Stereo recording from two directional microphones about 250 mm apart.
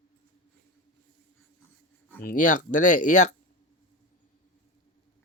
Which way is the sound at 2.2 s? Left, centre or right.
Left.